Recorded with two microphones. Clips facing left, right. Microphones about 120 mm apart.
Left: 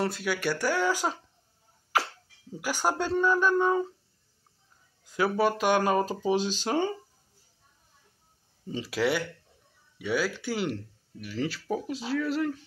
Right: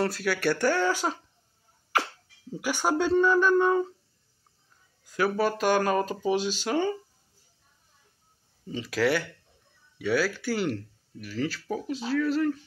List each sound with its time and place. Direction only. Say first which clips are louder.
0.0 s speech: right 2 dB; 15° left (ahead or behind)
2.6 s speech: right 3 dB; 5° left (ahead or behind)
5.0 s speech: even; 20° left (ahead or behind)
8.6 s speech: right 2 dB; 30° left (ahead or behind)